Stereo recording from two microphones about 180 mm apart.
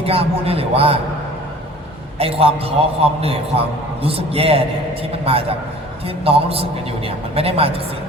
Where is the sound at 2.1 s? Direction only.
35° right (ahead or behind).